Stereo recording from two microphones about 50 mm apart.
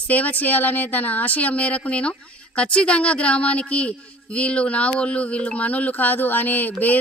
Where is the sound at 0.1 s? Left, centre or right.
Left.